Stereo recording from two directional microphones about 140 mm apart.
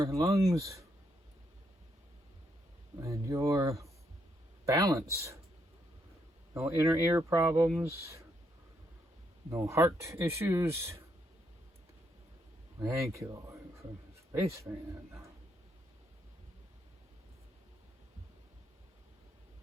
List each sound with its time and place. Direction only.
0.0 s speech: 20° right (ahead or behind)
3.0 s speech: 20° right (ahead or behind)
6.7 s speech: 20° right (ahead or behind)
9.5 s speech: 20° right (ahead or behind)
12.8 s speech: 20° right (ahead or behind)